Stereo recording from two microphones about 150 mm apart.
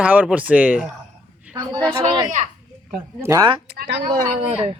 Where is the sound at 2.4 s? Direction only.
50° right (ahead or behind).